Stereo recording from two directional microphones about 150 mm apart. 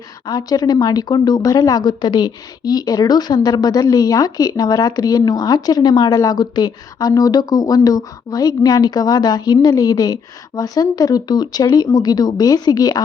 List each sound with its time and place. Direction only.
0.3 s speech: 25° left (ahead or behind)